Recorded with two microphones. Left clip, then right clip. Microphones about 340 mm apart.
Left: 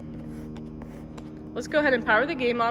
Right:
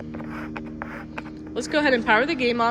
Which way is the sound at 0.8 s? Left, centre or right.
Left.